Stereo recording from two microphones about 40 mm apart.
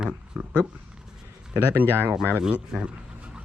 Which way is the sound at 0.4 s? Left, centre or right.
Right.